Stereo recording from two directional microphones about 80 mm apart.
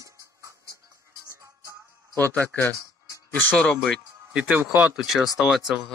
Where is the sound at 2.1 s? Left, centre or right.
Centre.